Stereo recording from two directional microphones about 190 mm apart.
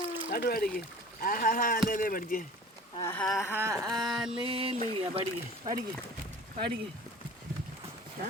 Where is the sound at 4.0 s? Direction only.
Centre (ahead or behind).